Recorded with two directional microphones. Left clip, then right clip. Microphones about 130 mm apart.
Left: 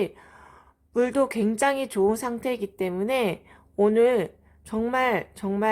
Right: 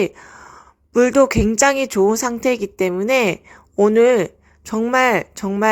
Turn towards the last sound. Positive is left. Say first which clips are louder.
# right 8 dB
turn(degrees=-35)  # may be behind; listen again after turning